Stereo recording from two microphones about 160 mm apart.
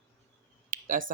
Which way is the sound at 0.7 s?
60° right (ahead or behind).